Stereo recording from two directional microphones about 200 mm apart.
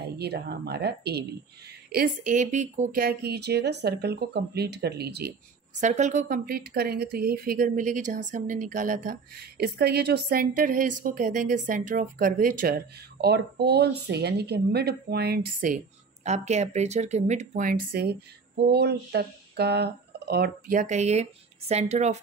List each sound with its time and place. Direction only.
0.0 s a woman's voice: 55° right (ahead or behind)
5.8 s speech: 35° right (ahead or behind)
16.3 s speech: 35° right (ahead or behind)